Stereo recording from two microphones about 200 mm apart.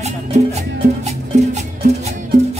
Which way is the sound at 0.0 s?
35° right (ahead or behind).